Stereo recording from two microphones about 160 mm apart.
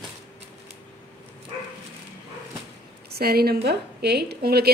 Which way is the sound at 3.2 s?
75° right (ahead or behind).